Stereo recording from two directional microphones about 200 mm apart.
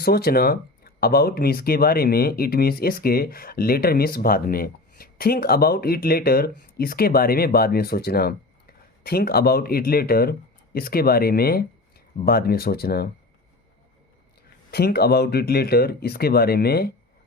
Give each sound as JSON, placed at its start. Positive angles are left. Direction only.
{"t": 0.0, "sound": "speech", "side_deg": 50}
{"t": 14.7, "sound": "speech", "side_deg": 50}